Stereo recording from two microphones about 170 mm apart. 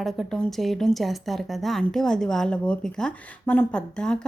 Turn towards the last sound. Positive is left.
turn(degrees=5)  # may be behind; listen again after turning